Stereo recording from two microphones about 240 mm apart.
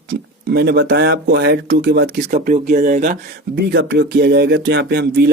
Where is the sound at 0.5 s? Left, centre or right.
Right.